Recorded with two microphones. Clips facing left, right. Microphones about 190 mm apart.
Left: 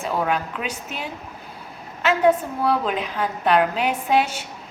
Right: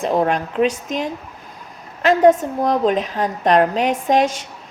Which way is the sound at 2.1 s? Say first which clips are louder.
Right 5 dB; 40° right (ahead or behind).